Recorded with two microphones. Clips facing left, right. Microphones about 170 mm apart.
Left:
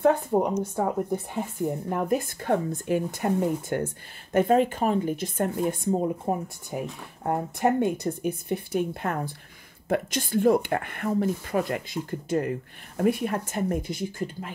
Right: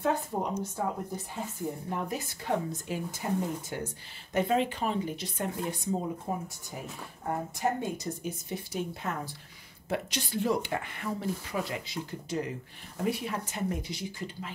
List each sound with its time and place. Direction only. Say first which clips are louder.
0.0 s a woman's voice: left 8 dB; 60° left (ahead or behind)